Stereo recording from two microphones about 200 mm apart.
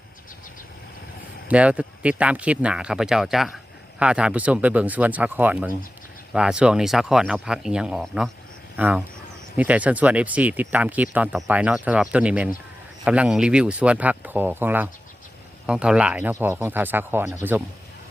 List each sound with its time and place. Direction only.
1.5 s speech: 5° right (ahead or behind)